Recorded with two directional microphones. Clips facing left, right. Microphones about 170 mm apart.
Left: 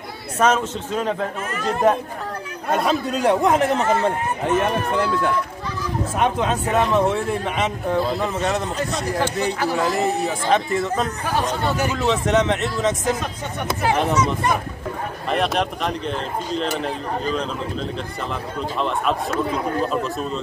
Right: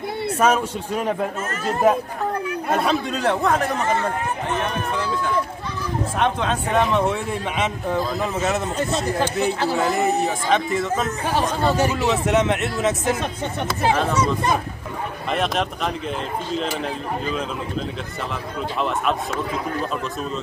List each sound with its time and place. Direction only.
0.4 s speech: 10° right (ahead or behind)
3.2 s a man's voice: 15° left (ahead or behind)
4.9 s speech: 55° left (ahead or behind)
6.1 s speech: 5° left (ahead or behind)
9.8 s speech: centre (ahead or behind)
11.6 s speech: 30° right (ahead or behind)
11.9 s speech: 5° right (ahead or behind)
15.3 s speech: centre (ahead or behind)
18.8 s speech: centre (ahead or behind)